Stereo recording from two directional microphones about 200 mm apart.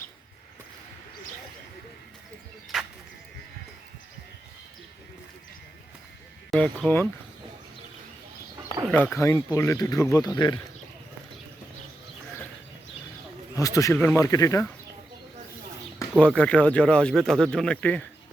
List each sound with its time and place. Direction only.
6.5 s speech: 5° left (ahead or behind)
8.8 s speech: 5° left (ahead or behind)
13.6 s speech: 15° left (ahead or behind)
16.1 s speech: 5° left (ahead or behind)